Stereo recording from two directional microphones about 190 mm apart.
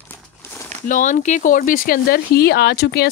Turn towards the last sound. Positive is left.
turn(degrees=60)  # may be behind; listen again after turning